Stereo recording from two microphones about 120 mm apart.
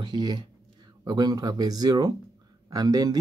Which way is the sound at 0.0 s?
35° right (ahead or behind).